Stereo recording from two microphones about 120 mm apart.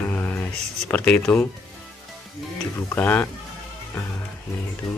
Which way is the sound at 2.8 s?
20° left (ahead or behind).